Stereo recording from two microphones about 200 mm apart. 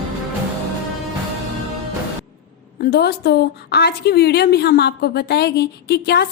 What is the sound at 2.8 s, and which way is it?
A woman's voice, 50° left (ahead or behind).